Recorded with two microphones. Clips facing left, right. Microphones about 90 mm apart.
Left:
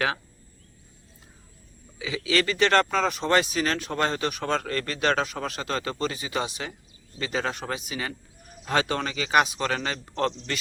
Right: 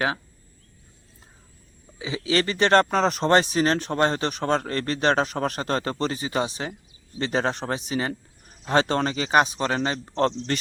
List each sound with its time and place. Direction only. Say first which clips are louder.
2.0 s speech: right 1 dB; 30° right (ahead or behind)
3.2 s speech: right 5 dB; 40° right (ahead or behind)
5.3 s speech: right 5 dB; 45° right (ahead or behind)